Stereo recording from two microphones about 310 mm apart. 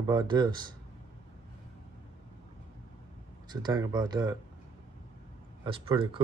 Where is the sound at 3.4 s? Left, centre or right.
Centre.